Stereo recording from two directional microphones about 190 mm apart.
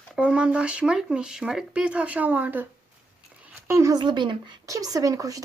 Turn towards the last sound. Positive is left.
turn(degrees=-20)  # may be behind; listen again after turning